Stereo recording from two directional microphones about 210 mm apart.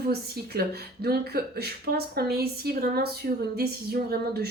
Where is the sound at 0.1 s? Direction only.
50° right (ahead or behind).